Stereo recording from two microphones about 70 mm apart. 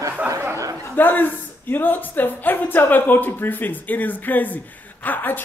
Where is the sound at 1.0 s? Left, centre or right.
Left.